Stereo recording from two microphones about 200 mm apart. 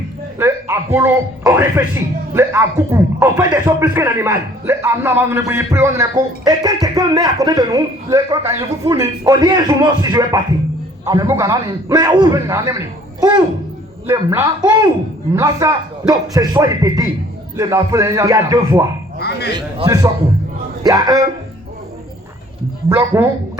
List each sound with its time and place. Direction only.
0.3 s a man's voice: 15° right (ahead or behind)
23.0 s a man's voice: 15° right (ahead or behind)